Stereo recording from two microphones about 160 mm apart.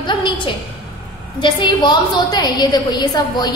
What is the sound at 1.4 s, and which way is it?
A woman's voice, 30° left (ahead or behind).